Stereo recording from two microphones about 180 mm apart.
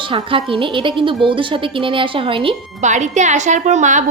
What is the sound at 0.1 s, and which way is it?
Speech, 30° right (ahead or behind).